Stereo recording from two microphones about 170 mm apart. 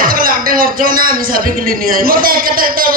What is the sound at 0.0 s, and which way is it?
Speech, 55° right (ahead or behind).